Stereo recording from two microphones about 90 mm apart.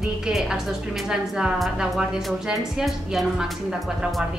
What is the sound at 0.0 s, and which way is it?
A woman's voice, 5° right (ahead or behind).